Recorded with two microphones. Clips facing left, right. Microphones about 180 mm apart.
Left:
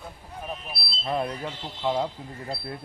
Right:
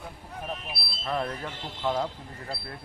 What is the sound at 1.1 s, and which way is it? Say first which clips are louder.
Speech: left 2 dB; 15° left (ahead or behind).